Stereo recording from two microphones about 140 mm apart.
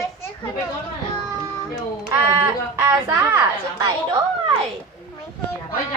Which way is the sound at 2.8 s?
20° right (ahead or behind).